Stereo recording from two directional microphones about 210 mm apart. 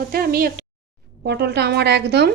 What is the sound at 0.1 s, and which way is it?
Speech, 45° right (ahead or behind).